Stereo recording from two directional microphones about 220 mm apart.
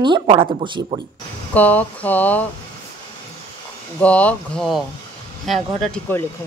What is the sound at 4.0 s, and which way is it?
Speech, 5° left (ahead or behind).